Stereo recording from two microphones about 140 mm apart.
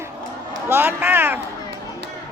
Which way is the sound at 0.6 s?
15° right (ahead or behind).